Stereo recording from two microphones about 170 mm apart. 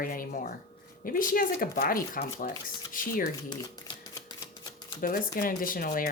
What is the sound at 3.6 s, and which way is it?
Typewriter, 20° left (ahead or behind).